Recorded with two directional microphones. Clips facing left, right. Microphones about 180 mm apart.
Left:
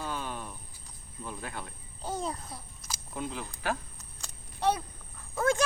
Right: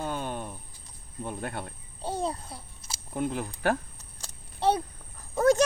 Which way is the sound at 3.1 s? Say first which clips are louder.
Right 7 dB; 55° right (ahead or behind).